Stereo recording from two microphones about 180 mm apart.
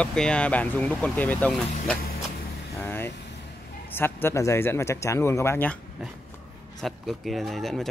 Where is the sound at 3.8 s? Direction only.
10° left (ahead or behind).